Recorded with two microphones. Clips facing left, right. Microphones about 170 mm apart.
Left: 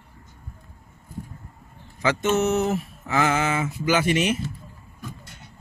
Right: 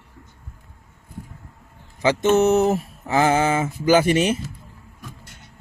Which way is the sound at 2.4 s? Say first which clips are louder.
Right 5 dB; 35° right (ahead or behind).